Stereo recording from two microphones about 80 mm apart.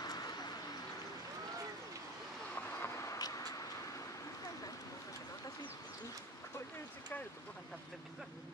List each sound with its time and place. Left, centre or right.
0.0 s a sound: left
2.5 s vehicle: left
3.2 s duck: left